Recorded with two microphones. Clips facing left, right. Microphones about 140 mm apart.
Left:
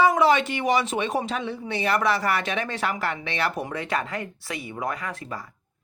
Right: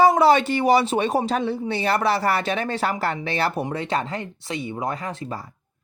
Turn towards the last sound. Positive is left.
turn(degrees=-30)  # may be behind; listen again after turning